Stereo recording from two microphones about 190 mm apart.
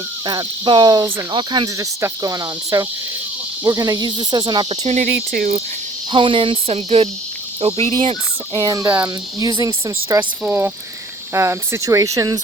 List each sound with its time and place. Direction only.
0.3 s cricket: 25° right (ahead or behind)
4.8 s cricket: 35° right (ahead or behind)
5.1 s cricket: 50° right (ahead or behind)
6.1 s cricket: 25° right (ahead or behind)
8.5 s speech: 20° right (ahead or behind)